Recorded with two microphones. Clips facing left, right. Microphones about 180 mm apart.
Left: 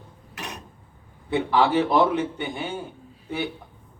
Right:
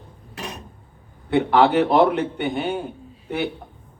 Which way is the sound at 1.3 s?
60° right (ahead or behind).